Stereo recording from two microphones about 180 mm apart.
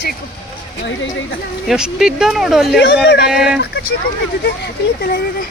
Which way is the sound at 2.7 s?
70° left (ahead or behind).